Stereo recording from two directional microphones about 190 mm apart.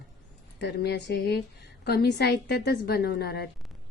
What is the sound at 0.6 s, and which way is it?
Speech, 60° left (ahead or behind).